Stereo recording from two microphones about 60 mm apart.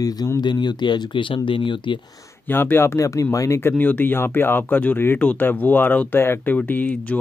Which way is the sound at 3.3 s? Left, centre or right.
Left.